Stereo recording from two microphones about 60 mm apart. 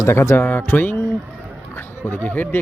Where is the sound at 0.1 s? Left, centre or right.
Left.